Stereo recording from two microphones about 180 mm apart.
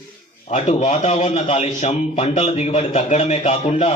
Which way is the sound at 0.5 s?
40° left (ahead or behind).